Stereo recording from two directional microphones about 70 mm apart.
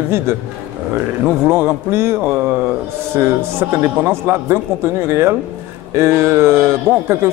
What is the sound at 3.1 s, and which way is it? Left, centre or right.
A man's voice, right.